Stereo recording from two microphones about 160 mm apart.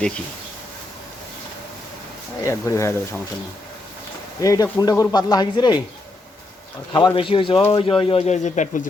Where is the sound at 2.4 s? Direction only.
20° left (ahead or behind).